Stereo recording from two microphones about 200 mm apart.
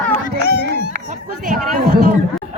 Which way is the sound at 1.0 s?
40° right (ahead or behind).